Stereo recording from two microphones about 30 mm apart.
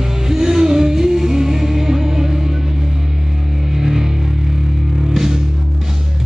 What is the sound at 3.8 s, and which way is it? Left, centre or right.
Music, centre.